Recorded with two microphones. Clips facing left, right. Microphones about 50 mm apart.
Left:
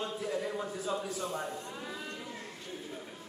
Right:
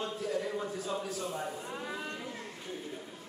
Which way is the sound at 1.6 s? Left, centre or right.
Centre.